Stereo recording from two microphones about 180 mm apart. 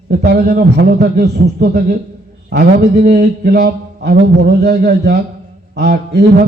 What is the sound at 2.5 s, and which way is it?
Speech, 45° right (ahead or behind).